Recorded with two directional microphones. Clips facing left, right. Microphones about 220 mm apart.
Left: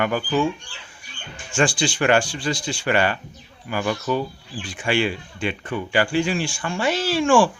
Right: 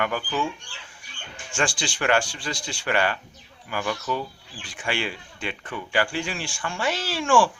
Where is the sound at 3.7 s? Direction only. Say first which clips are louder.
Left 5 dB; 25° left (ahead or behind).